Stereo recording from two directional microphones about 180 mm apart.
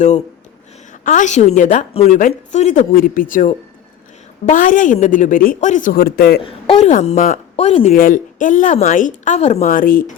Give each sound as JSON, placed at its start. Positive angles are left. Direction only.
{"t": 1.0, "sound": "a woman's voice", "side_deg": 45}
{"t": 6.4, "sound": "a woman's voice", "side_deg": 35}
{"t": 7.9, "sound": "a woman's voice", "side_deg": 50}